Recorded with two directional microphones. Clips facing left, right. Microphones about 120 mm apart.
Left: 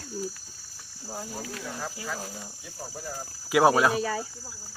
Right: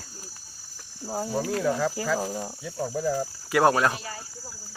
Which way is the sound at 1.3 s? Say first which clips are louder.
Right 12 dB; 80° right.